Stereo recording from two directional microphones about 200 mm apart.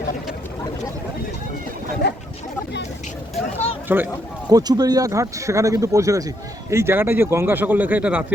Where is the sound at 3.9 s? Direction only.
10° right (ahead or behind).